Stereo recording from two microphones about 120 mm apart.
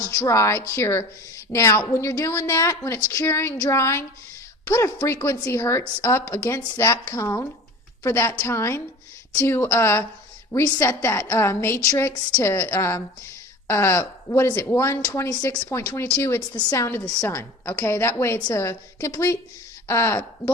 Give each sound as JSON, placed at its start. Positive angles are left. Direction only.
{"t": 0.2, "sound": "a woman's voice", "side_deg": 25}